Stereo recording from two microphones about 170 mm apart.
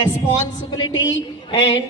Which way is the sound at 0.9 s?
90° left.